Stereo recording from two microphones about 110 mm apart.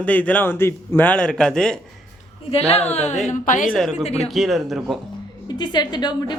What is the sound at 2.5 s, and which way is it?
Speech, 70° left (ahead or behind).